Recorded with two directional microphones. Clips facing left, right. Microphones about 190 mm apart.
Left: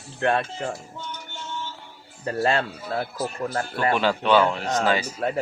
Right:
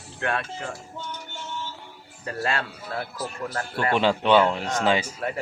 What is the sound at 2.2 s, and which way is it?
Speech, 25° left (ahead or behind).